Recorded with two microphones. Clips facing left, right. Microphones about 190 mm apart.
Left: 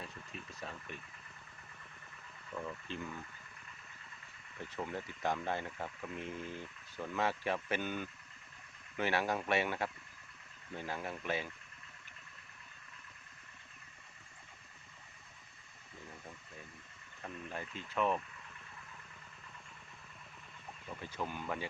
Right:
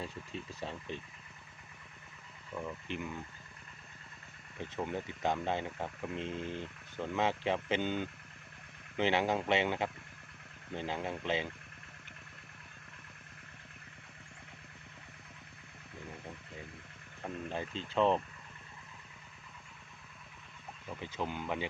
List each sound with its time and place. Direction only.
0.0 s a sound: 30° right (ahead or behind)
2.5 s speech: 15° right (ahead or behind)
4.6 s speech: 20° right (ahead or behind)
17.2 s speech: 30° right (ahead or behind)
21.0 s speech: 20° right (ahead or behind)